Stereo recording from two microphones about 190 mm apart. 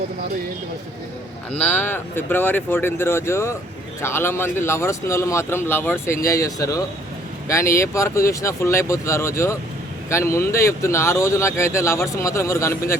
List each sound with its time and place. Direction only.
1.6 s speech: 10° left (ahead or behind)